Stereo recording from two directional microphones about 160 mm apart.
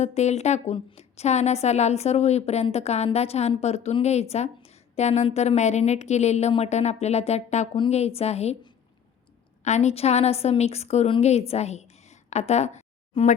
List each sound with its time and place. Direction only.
0.0 s a woman's voice: 45° left (ahead or behind)
9.6 s a woman's voice: 45° left (ahead or behind)